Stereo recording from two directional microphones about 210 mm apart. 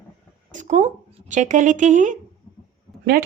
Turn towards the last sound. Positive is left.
turn(degrees=-45)  # may be behind; listen again after turning